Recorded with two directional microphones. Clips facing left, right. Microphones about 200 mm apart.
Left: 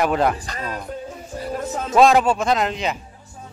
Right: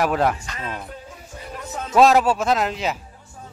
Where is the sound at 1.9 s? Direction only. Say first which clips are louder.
Even; 5° right (ahead or behind).